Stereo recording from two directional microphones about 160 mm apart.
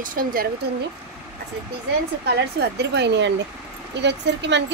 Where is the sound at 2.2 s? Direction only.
90° right.